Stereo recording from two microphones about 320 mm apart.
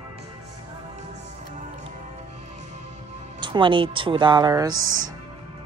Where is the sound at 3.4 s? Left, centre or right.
Centre.